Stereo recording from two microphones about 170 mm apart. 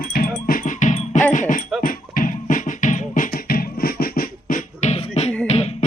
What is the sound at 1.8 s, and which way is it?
Music, 55° left (ahead or behind).